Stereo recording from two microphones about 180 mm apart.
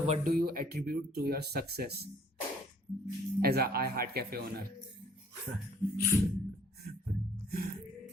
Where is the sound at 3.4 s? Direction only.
60° right (ahead or behind).